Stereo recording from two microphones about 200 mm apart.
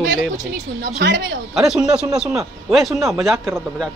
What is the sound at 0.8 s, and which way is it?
Speech, 60° right (ahead or behind).